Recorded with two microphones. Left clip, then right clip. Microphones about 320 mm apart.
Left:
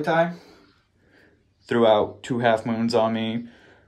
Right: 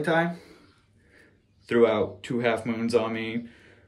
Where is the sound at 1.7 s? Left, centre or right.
Left.